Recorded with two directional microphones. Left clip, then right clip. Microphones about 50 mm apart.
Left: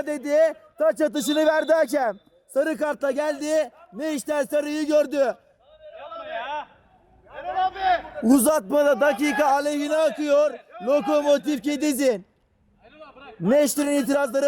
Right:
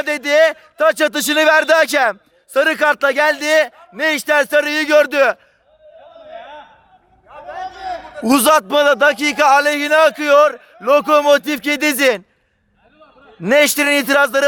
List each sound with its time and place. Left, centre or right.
0.0 s a man's voice: left
6.1 s a sound: left
8.4 s a man's voice: right; by 9.5 s centre
9.5 s a man's voice: left
13.0 s a sound: left
13.7 s a man's voice: left